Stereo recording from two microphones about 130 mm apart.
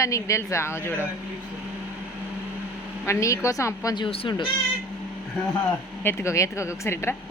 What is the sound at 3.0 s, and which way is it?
A woman's voice, 25° left (ahead or behind).